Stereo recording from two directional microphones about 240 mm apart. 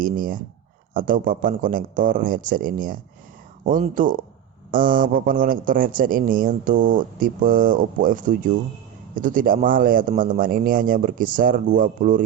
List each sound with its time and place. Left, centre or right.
0.0 s speech: right